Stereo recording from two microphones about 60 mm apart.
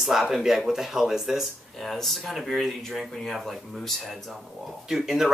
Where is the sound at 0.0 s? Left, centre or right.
Centre.